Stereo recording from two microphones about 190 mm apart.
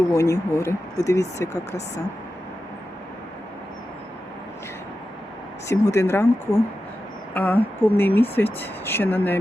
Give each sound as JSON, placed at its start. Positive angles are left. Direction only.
{"t": 0.1, "sound": "speech", "side_deg": 15}
{"t": 5.6, "sound": "speech", "side_deg": 15}